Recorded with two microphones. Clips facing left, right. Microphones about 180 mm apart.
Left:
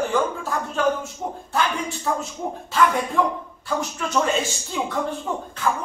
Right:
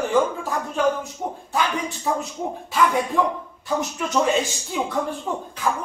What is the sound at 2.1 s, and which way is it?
Speech, 10° right (ahead or behind).